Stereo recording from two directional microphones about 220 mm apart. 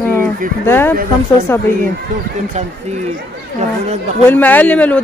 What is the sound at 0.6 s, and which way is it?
Speech, 10° left (ahead or behind).